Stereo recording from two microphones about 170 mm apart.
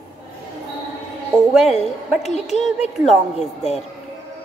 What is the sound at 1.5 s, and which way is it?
Speech, centre (ahead or behind).